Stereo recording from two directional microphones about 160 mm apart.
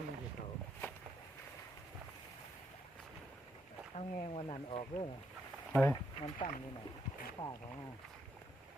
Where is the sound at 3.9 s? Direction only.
40° left (ahead or behind).